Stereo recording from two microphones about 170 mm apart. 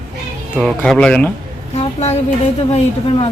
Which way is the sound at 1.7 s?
40° left (ahead or behind).